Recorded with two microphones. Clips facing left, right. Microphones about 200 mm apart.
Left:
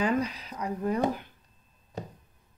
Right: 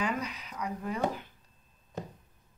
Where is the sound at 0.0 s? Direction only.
30° left (ahead or behind).